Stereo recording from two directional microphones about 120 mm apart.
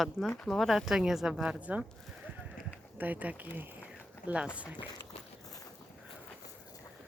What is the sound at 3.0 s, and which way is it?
Speech, 15° right (ahead or behind).